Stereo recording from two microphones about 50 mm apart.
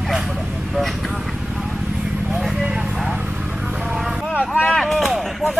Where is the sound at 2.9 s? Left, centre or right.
Centre.